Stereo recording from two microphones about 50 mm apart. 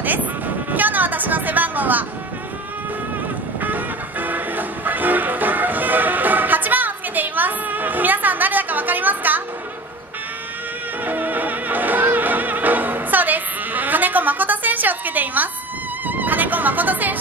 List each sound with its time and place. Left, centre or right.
0.7 s vehicle: right
3.6 s music: right
11.1 s music: right